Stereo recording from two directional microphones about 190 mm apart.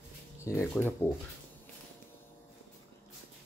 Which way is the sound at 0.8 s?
5° left (ahead or behind).